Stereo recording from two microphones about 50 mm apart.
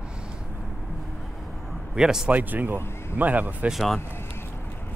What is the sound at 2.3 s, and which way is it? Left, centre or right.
Speech, right.